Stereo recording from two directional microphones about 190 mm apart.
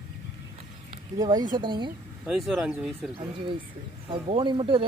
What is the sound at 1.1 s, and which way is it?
Speech, 20° right (ahead or behind).